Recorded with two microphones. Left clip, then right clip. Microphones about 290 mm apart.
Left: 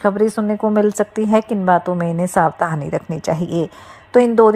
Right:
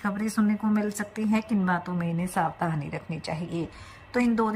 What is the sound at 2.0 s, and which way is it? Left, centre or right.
A woman's voice, left.